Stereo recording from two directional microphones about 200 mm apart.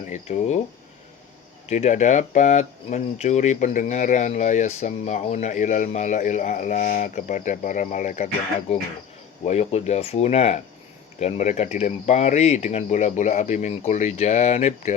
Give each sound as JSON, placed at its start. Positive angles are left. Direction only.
{"t": 0.1, "sound": "speech", "side_deg": 35}
{"t": 1.6, "sound": "speech", "side_deg": 35}